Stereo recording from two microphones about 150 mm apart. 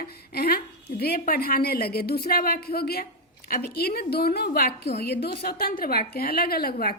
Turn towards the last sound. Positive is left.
turn(degrees=90)